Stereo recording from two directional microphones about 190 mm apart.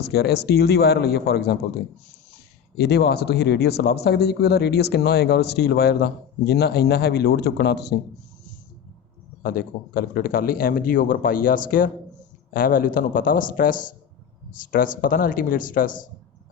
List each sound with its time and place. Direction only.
0.0 s speech: 60° left (ahead or behind)
2.7 s speech: 60° left (ahead or behind)
9.4 s a man's voice: 50° left (ahead or behind)